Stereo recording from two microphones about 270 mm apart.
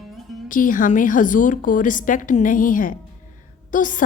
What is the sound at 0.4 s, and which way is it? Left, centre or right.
A woman's voice, left.